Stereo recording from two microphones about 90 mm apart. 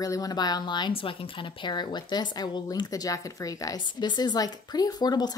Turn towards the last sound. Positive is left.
turn(degrees=50)  # may be behind; listen again after turning